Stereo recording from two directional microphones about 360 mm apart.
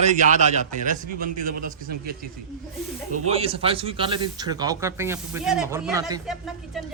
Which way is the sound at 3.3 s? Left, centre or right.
Centre.